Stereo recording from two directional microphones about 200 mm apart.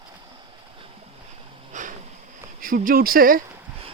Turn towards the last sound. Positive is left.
turn(degrees=-45)  # may be behind; listen again after turning